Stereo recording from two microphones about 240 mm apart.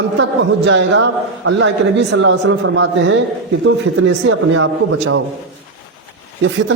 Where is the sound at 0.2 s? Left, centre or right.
Right.